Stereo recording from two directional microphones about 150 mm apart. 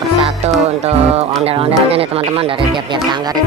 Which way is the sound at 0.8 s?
40° right (ahead or behind).